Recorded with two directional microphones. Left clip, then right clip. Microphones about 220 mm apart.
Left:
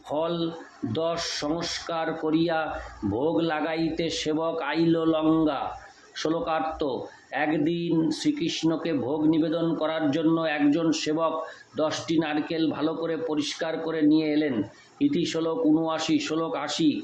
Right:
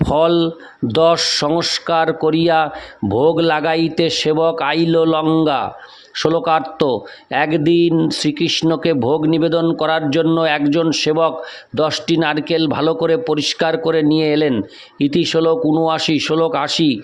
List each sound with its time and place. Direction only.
0.1 s speech: 50° right (ahead or behind)